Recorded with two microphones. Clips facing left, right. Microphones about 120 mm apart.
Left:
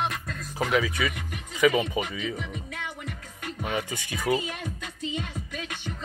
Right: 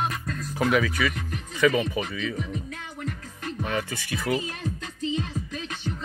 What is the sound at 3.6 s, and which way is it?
Speech, 15° left (ahead or behind).